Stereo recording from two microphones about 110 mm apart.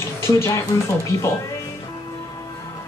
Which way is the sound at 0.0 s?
25° left (ahead or behind).